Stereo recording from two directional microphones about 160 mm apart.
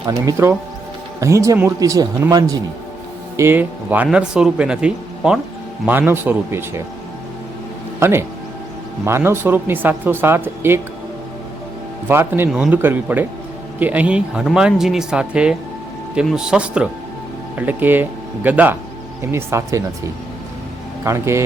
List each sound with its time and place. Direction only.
0.0 s speech: 20° right (ahead or behind)
7.9 s speech: 15° right (ahead or behind)
12.0 s speech: 15° right (ahead or behind)
21.0 s speech: 15° right (ahead or behind)